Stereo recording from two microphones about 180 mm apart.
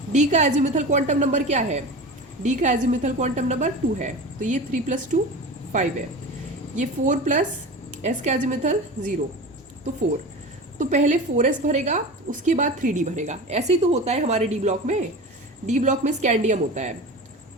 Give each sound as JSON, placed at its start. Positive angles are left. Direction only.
{"t": 0.1, "sound": "a woman's voice", "side_deg": -40}
{"t": 7.1, "sound": "a woman's voice", "side_deg": -45}
{"t": 10.8, "sound": "a woman's voice", "side_deg": -45}